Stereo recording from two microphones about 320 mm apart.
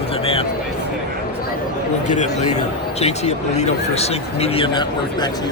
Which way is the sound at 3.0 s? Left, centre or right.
Left.